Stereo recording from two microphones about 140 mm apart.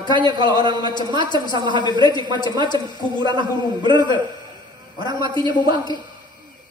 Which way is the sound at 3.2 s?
35° right (ahead or behind).